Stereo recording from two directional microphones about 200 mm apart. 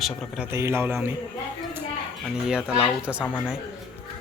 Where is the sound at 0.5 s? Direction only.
10° right (ahead or behind).